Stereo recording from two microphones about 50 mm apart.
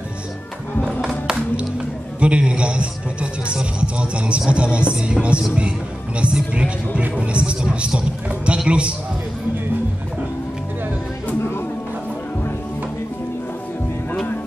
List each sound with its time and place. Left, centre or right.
2.1 s music: right